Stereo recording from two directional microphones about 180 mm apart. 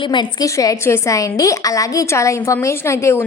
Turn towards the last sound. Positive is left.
turn(degrees=15)  # may be behind; listen again after turning